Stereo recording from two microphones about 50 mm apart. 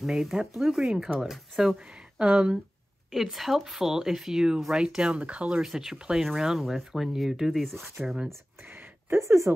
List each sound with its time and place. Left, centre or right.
0.0 s speech: centre
3.1 s speech: centre; by 5.6 s right
5.7 s speech: centre
8.6 s a sound: right
9.2 s speech: right